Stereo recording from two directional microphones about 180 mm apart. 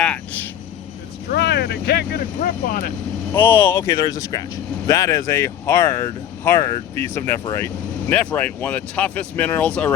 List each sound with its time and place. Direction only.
0.0 s a sound: 5° left (ahead or behind)
1.3 s speech: 65° left (ahead or behind); by 2.9 s 50° left (ahead or behind)
3.3 s speech: 10° left (ahead or behind)